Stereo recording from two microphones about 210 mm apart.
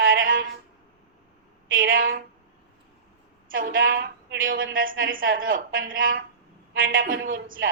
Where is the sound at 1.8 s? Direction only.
40° right (ahead or behind).